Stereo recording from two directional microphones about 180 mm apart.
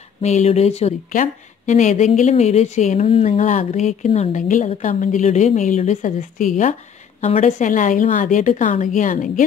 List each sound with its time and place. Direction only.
0.2 s a woman's voice: 40° left (ahead or behind)